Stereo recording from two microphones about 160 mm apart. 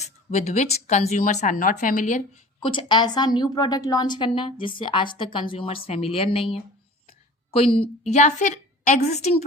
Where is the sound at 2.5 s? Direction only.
30° left (ahead or behind).